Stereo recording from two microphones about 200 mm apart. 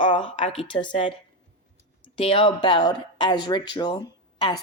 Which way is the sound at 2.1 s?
25° left (ahead or behind).